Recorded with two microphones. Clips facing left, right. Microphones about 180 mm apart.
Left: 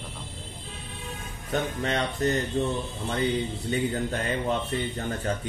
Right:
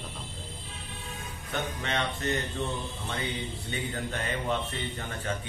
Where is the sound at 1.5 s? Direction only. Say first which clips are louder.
Left 5 dB; 35° left (ahead or behind).